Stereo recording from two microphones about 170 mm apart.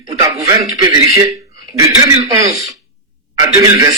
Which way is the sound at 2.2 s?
20° right (ahead or behind).